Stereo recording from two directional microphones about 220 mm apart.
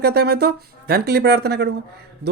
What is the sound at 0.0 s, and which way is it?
Speech, 45° right (ahead or behind).